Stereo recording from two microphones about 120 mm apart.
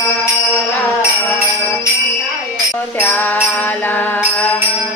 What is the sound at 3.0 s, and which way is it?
Music, 15° left (ahead or behind).